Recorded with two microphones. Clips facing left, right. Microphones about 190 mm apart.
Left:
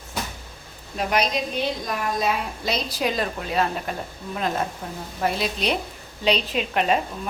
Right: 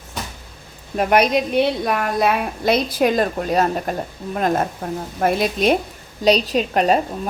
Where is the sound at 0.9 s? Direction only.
60° right (ahead or behind).